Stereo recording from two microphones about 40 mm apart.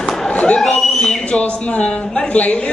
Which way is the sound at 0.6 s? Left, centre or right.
Centre.